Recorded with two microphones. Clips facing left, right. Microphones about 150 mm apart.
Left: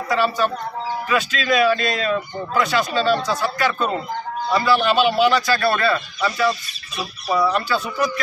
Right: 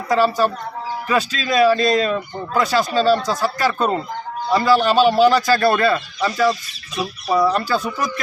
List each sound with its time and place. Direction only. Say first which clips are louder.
0.1 s speech: right 3 dB; 40° right (ahead or behind)